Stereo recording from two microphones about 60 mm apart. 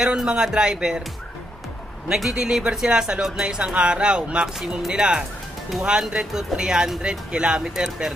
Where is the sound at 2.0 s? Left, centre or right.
Centre.